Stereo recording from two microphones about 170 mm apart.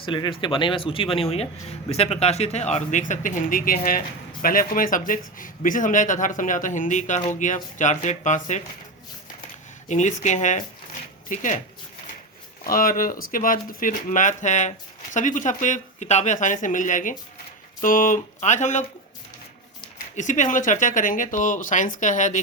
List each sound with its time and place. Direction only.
0.0 s speech: 30° left (ahead or behind); by 8.6 s 45° left (ahead or behind)
9.9 s speech: 45° left (ahead or behind)
12.6 s speech: 55° left (ahead or behind)
20.1 s speech: 45° left (ahead or behind)